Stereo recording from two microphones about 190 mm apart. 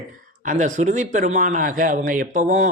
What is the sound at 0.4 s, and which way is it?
A man's voice, 40° right (ahead or behind).